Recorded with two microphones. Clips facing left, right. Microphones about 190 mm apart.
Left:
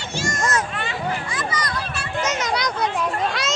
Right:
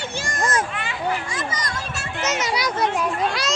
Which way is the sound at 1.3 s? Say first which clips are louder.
Left 2 dB; 45° right (ahead or behind).